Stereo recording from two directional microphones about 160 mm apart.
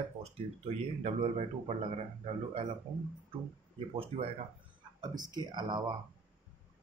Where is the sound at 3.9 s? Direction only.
35° right (ahead or behind).